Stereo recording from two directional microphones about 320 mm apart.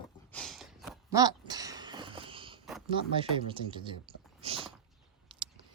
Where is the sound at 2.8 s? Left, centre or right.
Centre.